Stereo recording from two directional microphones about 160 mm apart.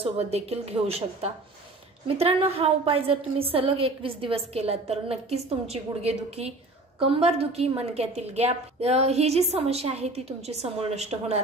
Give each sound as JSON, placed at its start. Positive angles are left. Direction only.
{"t": 0.0, "sound": "a woman's voice", "side_deg": -40}